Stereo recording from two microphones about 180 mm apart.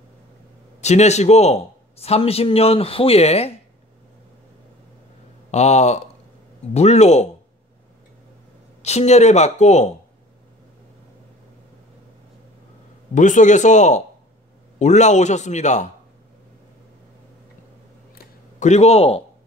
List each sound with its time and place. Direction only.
0.7 s a man's voice: 40° left (ahead or behind)
5.5 s a man's voice: 40° left (ahead or behind)
8.8 s a man's voice: 40° left (ahead or behind)
13.1 s a man's voice: 45° left (ahead or behind)
18.1 s a sound: 40° left (ahead or behind)